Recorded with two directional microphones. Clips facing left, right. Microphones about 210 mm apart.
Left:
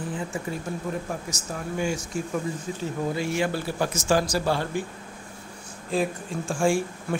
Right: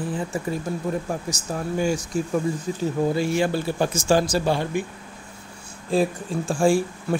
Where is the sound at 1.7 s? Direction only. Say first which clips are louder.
Right 4 dB; 35° right (ahead or behind).